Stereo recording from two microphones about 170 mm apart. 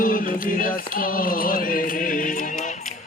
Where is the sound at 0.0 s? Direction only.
55° left (ahead or behind).